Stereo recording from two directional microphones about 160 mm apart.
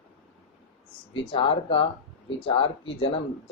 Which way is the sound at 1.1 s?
35° left (ahead or behind).